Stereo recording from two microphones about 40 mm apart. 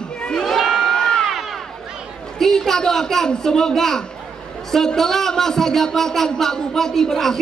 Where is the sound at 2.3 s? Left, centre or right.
Centre.